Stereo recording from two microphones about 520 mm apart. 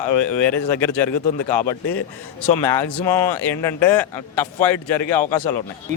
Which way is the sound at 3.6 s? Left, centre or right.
Centre.